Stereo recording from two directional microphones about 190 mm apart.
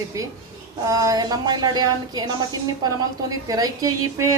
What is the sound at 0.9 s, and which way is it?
A woman's voice, 15° right (ahead or behind).